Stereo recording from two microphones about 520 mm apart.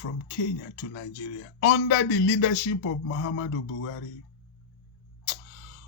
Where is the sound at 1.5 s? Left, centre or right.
Left.